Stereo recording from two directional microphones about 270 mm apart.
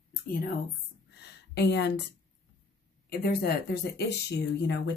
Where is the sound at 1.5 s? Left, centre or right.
Left.